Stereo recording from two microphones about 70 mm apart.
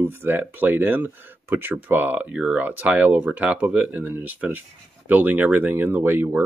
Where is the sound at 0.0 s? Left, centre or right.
Right.